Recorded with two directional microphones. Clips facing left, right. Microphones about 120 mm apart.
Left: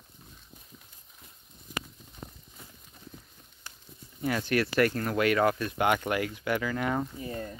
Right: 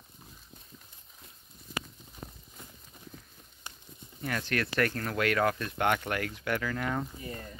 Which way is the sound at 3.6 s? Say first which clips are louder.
Right 2 dB; 20° right (ahead or behind).